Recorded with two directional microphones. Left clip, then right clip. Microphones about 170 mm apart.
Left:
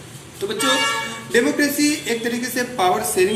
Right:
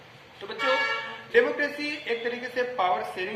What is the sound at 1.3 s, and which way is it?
A woman's voice, 15° left (ahead or behind).